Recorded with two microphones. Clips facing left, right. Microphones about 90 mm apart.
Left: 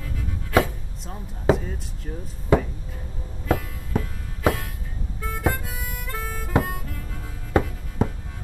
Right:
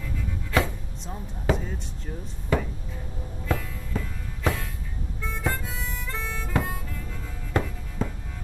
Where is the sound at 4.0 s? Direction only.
10° left (ahead or behind).